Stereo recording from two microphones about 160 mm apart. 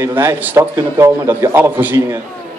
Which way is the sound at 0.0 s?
15° right (ahead or behind).